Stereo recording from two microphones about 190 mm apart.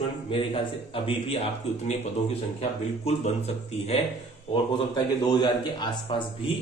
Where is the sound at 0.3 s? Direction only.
30° left (ahead or behind).